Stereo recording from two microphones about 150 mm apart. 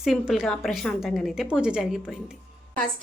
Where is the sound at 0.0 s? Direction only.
Centre (ahead or behind).